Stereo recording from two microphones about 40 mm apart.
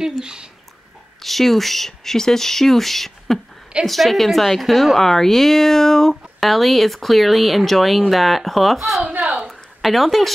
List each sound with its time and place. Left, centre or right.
0.2 s speech: centre
1.2 s speech: centre
9.4 s a sound: centre